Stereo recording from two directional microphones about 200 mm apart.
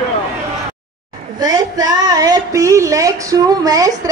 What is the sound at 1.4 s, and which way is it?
A woman's voice, 20° right (ahead or behind).